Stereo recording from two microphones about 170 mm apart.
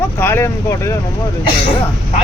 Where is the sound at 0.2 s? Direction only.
15° left (ahead or behind).